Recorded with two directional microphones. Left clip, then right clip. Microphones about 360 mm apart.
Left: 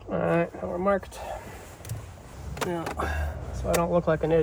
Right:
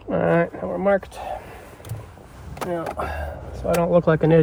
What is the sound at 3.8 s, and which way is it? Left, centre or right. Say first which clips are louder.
Speech: right 8 dB; right.